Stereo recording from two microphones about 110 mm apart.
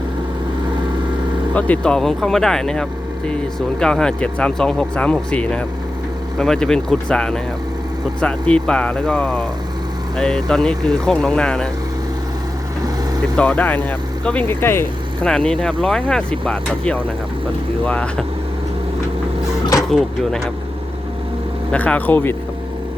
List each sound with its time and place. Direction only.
1.5 s speech: 15° left (ahead or behind)
13.3 s speech: 10° left (ahead or behind)
15.2 s speech: 10° left (ahead or behind)
19.9 s speech: 5° left (ahead or behind)
21.7 s speech: 10° left (ahead or behind)